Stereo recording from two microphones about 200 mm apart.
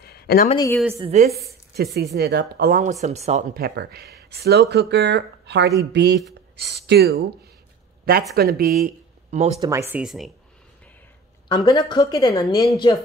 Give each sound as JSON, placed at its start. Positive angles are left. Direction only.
{"t": 0.0, "sound": "a sound", "side_deg": 50}
{"t": 1.0, "sound": "a woman's voice", "side_deg": -35}
{"t": 1.5, "sound": "a woman's voice", "side_deg": -55}
{"t": 9.6, "sound": "speech", "side_deg": -15}
{"t": 11.4, "sound": "a woman's voice", "side_deg": 20}